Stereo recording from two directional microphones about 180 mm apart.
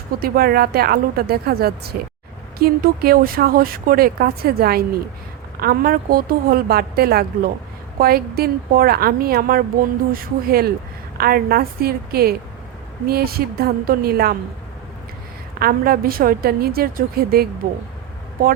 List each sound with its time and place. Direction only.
0.2 s speech: 55° right (ahead or behind)
15.5 s speech: 55° right (ahead or behind)